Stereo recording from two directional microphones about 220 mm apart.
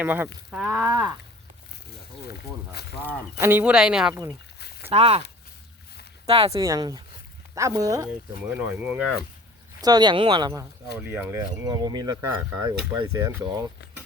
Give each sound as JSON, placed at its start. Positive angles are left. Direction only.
{"t": 0.0, "sound": "speech", "side_deg": -5}
{"t": 3.4, "sound": "speech", "side_deg": -5}
{"t": 4.1, "sound": "speech", "side_deg": -15}
{"t": 4.9, "sound": "speech", "side_deg": -25}
{"t": 6.2, "sound": "speech", "side_deg": -25}
{"t": 9.8, "sound": "speech", "side_deg": -20}
{"t": 11.7, "sound": "speech", "side_deg": -20}